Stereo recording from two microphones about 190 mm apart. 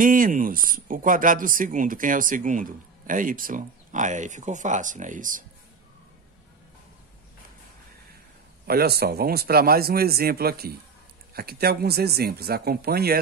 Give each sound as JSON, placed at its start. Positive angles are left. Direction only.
{"t": 0.0, "sound": "speech", "side_deg": -45}
{"t": 8.6, "sound": "speech", "side_deg": -55}